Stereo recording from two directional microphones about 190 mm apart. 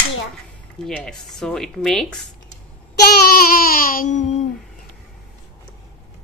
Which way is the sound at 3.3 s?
50° left (ahead or behind).